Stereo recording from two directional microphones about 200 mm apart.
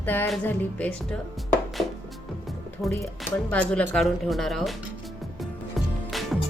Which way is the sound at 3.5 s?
5° left (ahead or behind).